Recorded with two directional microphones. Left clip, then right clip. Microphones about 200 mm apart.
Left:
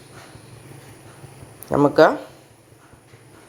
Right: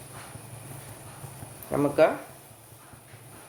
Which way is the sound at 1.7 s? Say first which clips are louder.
Left 8 dB; 35° left (ahead or behind).